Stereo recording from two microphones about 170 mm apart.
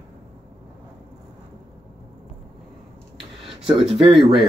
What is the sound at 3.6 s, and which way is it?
Speech, 5° right (ahead or behind).